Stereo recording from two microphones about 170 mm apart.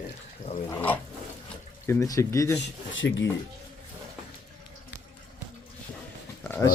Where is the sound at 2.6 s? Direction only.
90° left.